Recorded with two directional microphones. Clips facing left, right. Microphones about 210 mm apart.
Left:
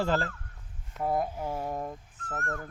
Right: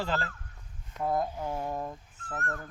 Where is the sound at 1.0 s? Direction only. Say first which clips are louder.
Left 1 dB; 10° left (ahead or behind).